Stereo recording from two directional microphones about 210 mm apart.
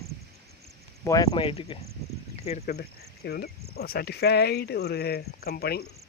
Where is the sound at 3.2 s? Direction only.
50° left (ahead or behind).